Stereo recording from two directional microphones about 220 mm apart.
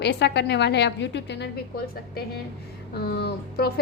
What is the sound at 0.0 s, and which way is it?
Speech, 50° left (ahead or behind).